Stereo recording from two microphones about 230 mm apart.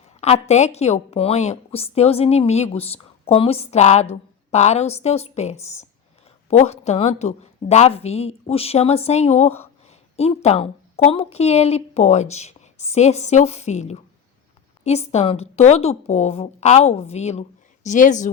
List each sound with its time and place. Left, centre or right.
0.2 s a woman's voice: left